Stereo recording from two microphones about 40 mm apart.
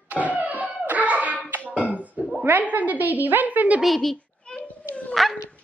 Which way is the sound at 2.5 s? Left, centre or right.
Right.